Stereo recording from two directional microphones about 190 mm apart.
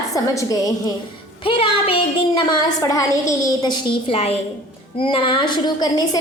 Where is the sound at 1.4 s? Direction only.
30° left (ahead or behind).